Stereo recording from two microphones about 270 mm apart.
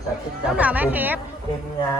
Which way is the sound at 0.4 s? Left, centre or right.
Centre.